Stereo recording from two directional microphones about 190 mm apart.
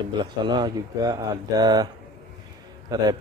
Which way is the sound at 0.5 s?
20° right (ahead or behind).